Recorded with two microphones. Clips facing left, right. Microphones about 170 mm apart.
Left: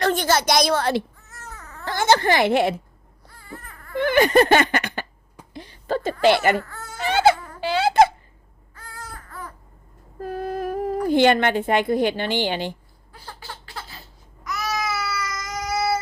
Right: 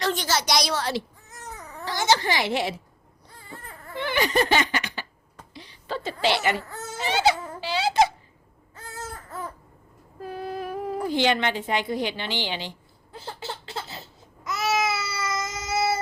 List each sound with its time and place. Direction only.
0.0 s speech: 55° left (ahead or behind)
1.3 s a sound: 15° right (ahead or behind)
1.8 s a woman's voice: 55° left (ahead or behind)
3.2 s baby cry: 20° right (ahead or behind)
3.9 s speech: 50° left (ahead or behind)
5.5 s a sound: 50° left (ahead or behind)
6.2 s speech: 50° left (ahead or behind)
6.7 s speech: 20° right (ahead or behind)
7.0 s a child's voice: 55° left (ahead or behind)
8.7 s baby cry: 25° right (ahead or behind)
10.2 s speech: 45° left (ahead or behind)
13.1 s a sound: 25° right (ahead or behind)
14.4 s baby cry: 25° right (ahead or behind)